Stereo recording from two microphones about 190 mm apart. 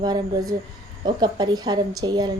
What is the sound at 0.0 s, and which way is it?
A woman's voice, 20° right (ahead or behind).